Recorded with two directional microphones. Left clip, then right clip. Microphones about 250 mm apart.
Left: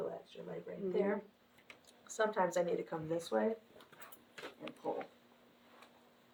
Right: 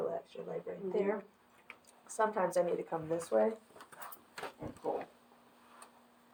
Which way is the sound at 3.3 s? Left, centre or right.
Left.